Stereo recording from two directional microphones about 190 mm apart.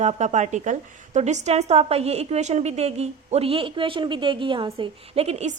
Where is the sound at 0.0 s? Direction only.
35° right (ahead or behind).